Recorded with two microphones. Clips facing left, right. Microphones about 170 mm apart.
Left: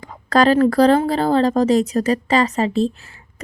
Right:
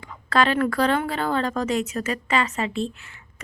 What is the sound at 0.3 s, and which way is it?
A woman's voice, 40° left (ahead or behind).